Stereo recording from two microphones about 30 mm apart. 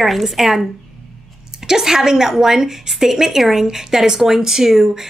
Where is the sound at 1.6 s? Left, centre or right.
Centre.